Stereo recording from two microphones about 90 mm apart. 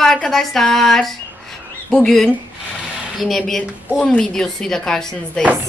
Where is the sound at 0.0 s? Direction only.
5° left (ahead or behind).